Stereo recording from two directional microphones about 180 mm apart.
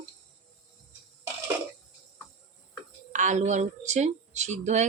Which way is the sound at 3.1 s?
40° right (ahead or behind).